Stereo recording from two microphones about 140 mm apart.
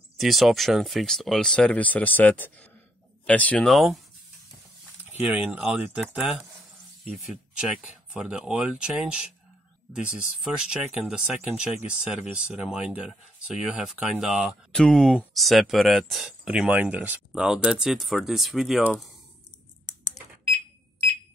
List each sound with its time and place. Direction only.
0.2 s speech: centre (ahead or behind)
5.5 s speech: 10° right (ahead or behind)
14.7 s speech: 5° left (ahead or behind)